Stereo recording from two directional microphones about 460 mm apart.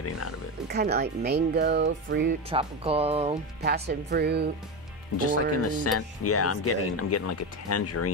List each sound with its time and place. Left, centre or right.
0.7 s speech: right
2.5 s speech: centre
5.1 s speech: left